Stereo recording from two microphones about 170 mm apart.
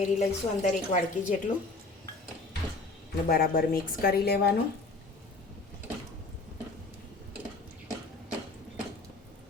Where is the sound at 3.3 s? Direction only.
60° left (ahead or behind).